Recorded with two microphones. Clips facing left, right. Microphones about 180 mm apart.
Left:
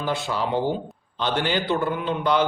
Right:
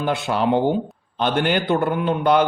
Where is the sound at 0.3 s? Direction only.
65° right (ahead or behind).